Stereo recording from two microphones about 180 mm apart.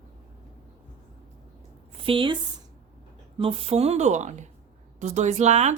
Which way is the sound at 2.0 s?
30° right (ahead or behind).